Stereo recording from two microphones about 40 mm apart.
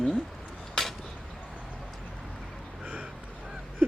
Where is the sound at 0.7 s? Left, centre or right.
Centre.